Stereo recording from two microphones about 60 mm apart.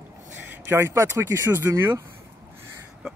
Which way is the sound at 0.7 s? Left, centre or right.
Right.